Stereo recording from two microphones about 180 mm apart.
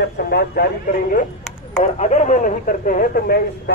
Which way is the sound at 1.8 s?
40° left (ahead or behind).